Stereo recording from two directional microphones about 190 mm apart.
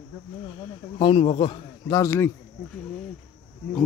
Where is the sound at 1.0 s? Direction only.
30° left (ahead or behind).